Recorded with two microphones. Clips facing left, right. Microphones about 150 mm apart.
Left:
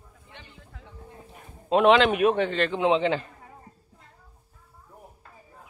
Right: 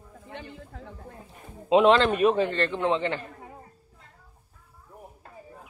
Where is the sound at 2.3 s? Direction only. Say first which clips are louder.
Even; 90° left.